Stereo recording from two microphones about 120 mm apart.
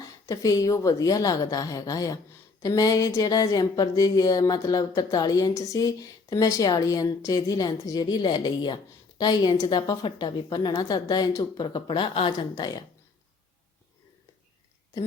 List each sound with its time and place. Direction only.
0.3 s a woman's voice: 30° left (ahead or behind)